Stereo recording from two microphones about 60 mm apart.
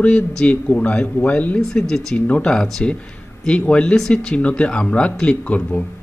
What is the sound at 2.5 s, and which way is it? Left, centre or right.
Speech, centre.